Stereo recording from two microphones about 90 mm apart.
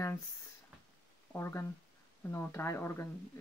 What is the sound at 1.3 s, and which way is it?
Speech, 30° left (ahead or behind).